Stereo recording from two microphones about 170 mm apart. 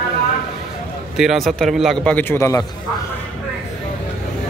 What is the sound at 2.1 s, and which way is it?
Speech, 15° left (ahead or behind).